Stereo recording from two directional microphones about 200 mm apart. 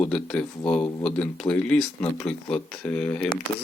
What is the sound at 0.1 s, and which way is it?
Speech, 5° left (ahead or behind).